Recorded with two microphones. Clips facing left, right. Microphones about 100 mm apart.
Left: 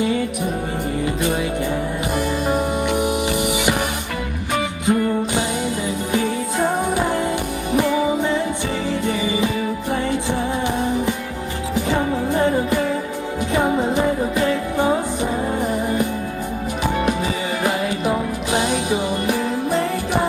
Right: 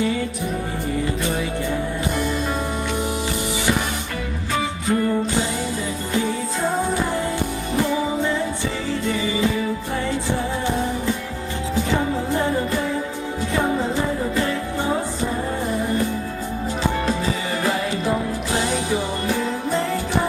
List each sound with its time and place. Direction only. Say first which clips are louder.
2.1 s music: left 6 dB; 15° left (ahead or behind)
4.9 s music: left 3 dB; 15° left (ahead or behind)
6.6 s music: left 3 dB; 20° left (ahead or behind)
11.7 s music: left 1 dB; 15° left (ahead or behind)
17.6 s music: left 3 dB; 20° left (ahead or behind)